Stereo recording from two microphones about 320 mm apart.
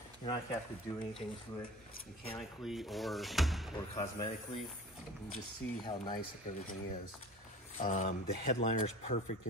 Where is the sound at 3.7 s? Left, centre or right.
Centre.